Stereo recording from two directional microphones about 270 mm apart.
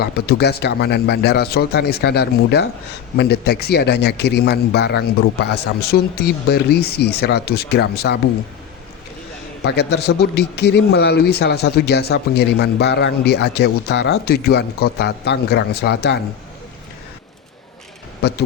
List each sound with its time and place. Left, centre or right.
0.0 s a man's voice: left
9.6 s a man's voice: left
18.2 s a man's voice: left